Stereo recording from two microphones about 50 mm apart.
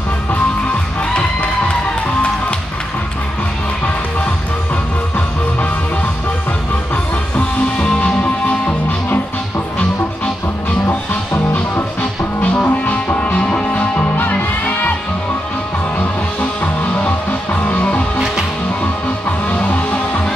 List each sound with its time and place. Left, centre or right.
8.0 s music: left
12.0 s music: left
16.0 s music: left
19.5 s music: left